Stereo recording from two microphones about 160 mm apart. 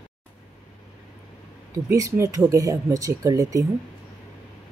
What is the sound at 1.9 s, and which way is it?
Speech, 20° right (ahead or behind).